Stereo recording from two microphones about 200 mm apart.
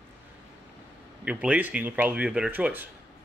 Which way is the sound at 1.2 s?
5° right (ahead or behind).